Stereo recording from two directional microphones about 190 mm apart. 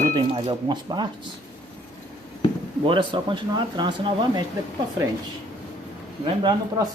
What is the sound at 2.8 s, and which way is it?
Speech, 25° right (ahead or behind).